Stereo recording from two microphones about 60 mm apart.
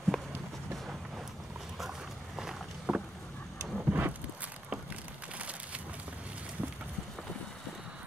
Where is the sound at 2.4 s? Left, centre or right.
Centre.